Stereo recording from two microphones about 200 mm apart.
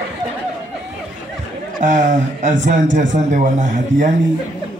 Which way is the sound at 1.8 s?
40° right (ahead or behind).